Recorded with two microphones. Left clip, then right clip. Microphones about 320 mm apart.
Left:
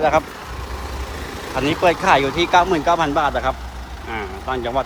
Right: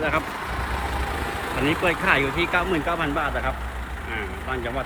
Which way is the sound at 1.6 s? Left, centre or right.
Centre.